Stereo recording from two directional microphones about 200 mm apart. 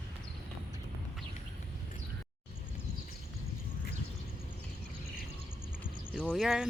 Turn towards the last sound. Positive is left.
turn(degrees=0)  # may be behind; listen again after turning